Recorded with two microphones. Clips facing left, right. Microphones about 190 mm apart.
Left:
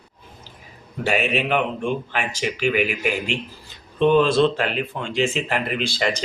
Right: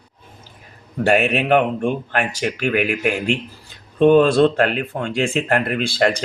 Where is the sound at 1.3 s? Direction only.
55° right (ahead or behind).